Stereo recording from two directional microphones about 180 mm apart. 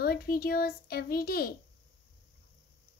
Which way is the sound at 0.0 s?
60° left (ahead or behind).